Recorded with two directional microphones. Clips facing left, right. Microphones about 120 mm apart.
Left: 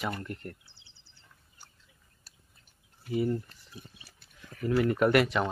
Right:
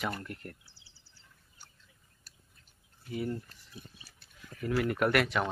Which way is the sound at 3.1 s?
5° left (ahead or behind).